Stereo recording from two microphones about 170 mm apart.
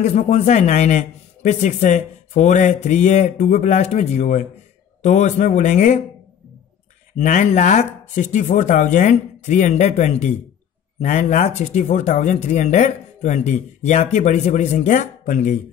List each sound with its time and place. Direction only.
0.0 s speech: 40° left (ahead or behind)
7.2 s speech: 45° left (ahead or behind)